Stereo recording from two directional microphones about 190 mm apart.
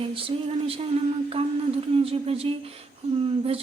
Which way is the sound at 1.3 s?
30° right (ahead or behind).